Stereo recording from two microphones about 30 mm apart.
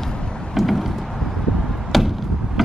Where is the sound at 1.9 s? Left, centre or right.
Centre.